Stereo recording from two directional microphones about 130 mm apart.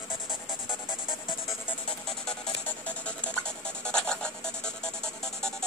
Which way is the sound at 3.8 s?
5° left (ahead or behind).